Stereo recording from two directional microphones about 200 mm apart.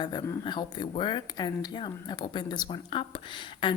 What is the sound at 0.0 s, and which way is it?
Speech, 20° left (ahead or behind).